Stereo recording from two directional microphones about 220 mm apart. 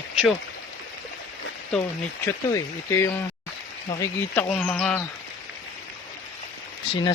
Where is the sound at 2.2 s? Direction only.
10° left (ahead or behind).